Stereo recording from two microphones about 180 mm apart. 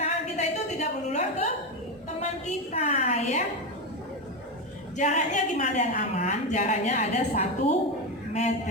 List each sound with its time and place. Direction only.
0.0 s a sound: 40° left (ahead or behind)
2.7 s a woman's voice: 40° left (ahead or behind)
4.9 s a woman's voice: 40° left (ahead or behind)